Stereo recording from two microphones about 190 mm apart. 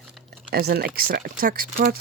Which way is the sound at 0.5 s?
55° right (ahead or behind).